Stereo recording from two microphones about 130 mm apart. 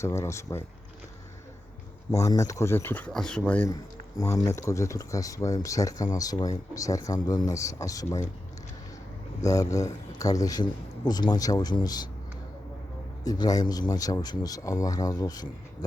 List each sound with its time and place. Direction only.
0.0 s speech: 20° left (ahead or behind)
2.1 s speech: 25° left (ahead or behind)
4.4 s speech: 25° left (ahead or behind)
9.4 s speech: 25° left (ahead or behind)
13.2 s speech: 30° left (ahead or behind)